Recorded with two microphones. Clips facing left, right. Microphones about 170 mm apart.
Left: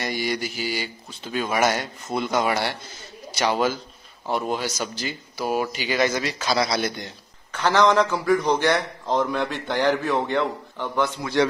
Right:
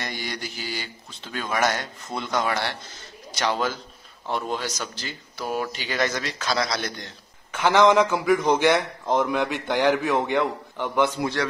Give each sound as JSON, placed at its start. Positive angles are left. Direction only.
{"t": 0.0, "sound": "speech", "side_deg": 5}
{"t": 7.6, "sound": "a man's voice", "side_deg": -15}